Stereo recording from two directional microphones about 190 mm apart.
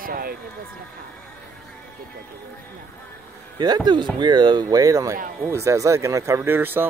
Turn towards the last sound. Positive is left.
turn(degrees=-10)  # may be behind; listen again after turning